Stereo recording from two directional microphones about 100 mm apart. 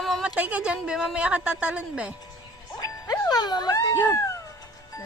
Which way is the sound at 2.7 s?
40° left (ahead or behind).